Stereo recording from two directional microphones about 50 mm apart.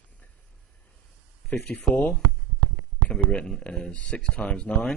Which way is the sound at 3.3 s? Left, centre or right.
Left.